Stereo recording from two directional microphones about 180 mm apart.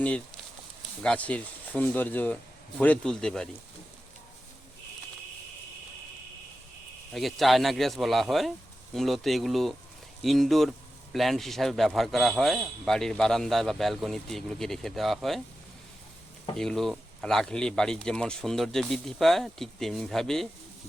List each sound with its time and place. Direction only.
1.0 s speech: 5° left (ahead or behind)
7.1 s speech: centre (ahead or behind)
16.6 s speech: centre (ahead or behind)